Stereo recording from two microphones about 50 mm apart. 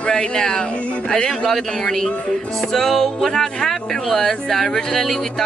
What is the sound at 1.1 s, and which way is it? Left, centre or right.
Speech, centre.